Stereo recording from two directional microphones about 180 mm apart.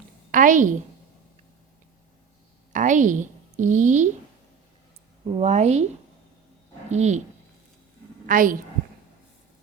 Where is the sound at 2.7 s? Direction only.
45° right (ahead or behind).